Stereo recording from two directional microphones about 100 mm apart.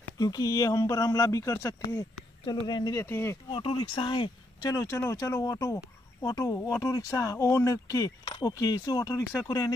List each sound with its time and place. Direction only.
0.2 s speech: 40° left (ahead or behind)
2.6 s speech: 45° left (ahead or behind)
3.0 s speech: 25° left (ahead or behind)
3.5 s speech: 55° left (ahead or behind)
4.6 s speech: 35° left (ahead or behind)